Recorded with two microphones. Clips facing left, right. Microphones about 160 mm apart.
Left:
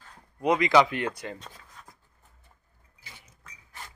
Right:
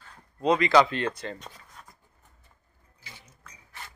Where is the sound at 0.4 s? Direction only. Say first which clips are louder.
Right 1 dB; 15° left (ahead or behind).